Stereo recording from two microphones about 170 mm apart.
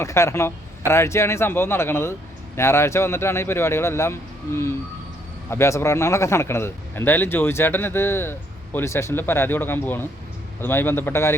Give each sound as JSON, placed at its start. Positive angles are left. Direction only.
{"t": 0.0, "sound": "a man's voice", "side_deg": 15}